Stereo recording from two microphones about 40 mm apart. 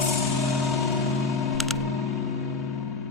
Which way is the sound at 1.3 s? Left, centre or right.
Centre.